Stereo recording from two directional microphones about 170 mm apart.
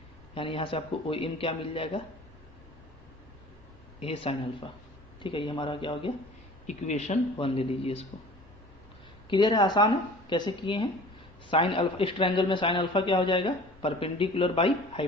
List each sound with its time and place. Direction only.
0.3 s a man's voice: 30° left (ahead or behind)
4.0 s a man's voice: 35° left (ahead or behind)
6.7 s a man's voice: 40° left (ahead or behind)
9.3 s a man's voice: 25° left (ahead or behind)